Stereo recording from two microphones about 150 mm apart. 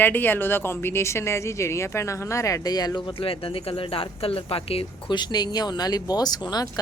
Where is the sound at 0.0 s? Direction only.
15° left (ahead or behind).